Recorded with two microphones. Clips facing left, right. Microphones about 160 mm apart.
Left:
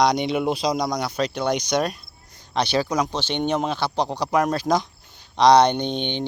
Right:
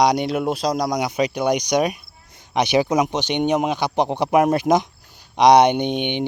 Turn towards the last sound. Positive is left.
turn(degrees=-15)  # may be behind; listen again after turning